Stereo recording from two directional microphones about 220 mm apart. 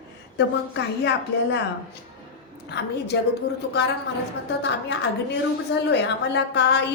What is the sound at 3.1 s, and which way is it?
Speech, 50° left (ahead or behind).